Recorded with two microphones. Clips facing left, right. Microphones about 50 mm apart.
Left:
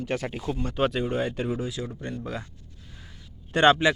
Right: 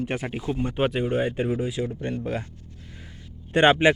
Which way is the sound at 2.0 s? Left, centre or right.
Right.